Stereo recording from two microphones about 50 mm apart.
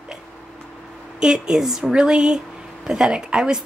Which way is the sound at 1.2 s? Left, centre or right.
Centre.